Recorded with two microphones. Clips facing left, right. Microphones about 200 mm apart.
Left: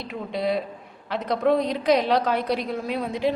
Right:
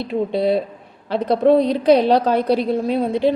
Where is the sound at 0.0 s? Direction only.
30° right (ahead or behind).